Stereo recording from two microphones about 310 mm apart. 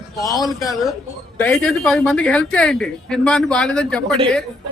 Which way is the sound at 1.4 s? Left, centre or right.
Centre.